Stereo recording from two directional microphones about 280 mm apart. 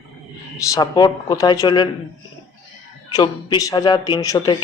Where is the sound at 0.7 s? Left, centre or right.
Centre.